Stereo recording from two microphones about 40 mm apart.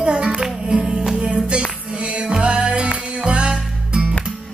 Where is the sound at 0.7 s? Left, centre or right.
Right.